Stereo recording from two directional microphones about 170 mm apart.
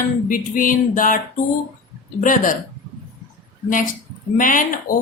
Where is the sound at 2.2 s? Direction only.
50° left (ahead or behind).